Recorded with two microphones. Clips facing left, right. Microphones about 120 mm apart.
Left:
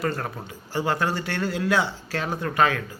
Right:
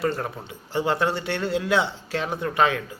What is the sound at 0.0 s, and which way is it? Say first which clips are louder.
A man's voice: right 2 dB; 20° right (ahead or behind).